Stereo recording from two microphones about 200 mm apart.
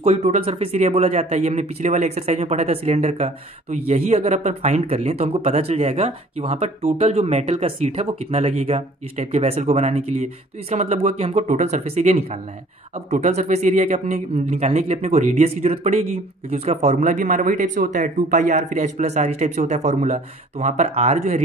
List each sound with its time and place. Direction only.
0.0 s speech: 35° right (ahead or behind)